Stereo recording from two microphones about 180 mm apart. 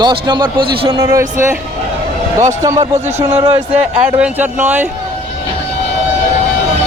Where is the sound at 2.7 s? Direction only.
35° right (ahead or behind).